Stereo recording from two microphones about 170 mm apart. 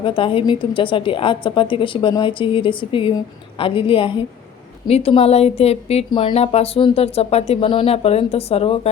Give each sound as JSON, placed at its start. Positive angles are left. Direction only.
{"t": 0.0, "sound": "a woman's voice", "side_deg": 30}